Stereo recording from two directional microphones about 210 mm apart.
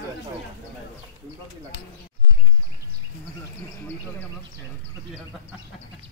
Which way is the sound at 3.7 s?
10° left (ahead or behind).